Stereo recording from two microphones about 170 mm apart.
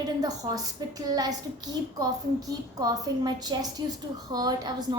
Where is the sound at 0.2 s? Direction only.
20° right (ahead or behind).